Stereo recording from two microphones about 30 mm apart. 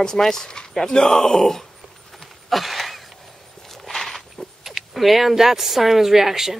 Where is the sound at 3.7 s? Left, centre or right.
Centre.